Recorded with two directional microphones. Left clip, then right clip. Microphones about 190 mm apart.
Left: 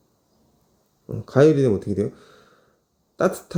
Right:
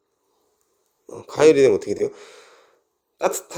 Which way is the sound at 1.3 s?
25° right (ahead or behind).